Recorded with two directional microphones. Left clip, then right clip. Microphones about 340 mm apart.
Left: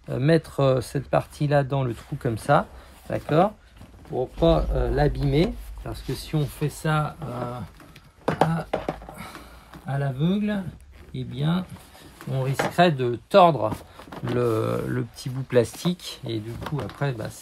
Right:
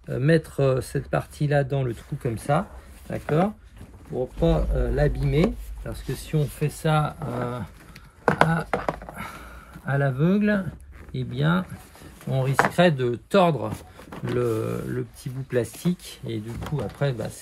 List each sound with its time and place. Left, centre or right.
0.1 s speech: centre
4.4 s speech: centre
8.5 s chopping: centre
9.8 s speech: centre